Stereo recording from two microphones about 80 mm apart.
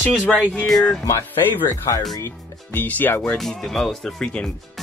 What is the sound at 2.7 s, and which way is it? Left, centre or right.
Speech, left.